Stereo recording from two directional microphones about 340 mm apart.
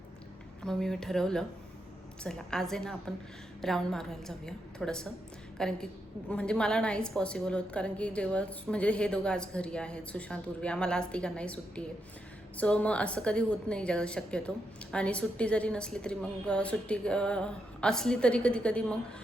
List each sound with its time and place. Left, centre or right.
0.6 s a woman's voice: centre